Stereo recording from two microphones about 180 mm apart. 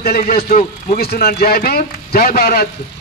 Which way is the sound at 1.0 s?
65° left (ahead or behind).